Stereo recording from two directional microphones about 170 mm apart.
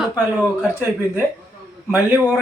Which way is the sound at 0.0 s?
10° right (ahead or behind).